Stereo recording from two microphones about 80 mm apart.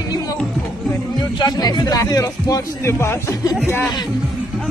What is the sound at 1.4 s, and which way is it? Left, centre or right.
Speech, left.